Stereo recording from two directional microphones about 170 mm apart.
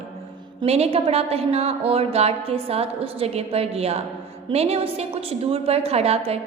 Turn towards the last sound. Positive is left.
turn(degrees=-35)  # may be behind; listen again after turning